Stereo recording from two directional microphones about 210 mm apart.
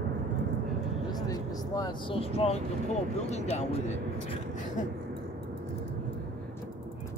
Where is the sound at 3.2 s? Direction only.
30° left (ahead or behind).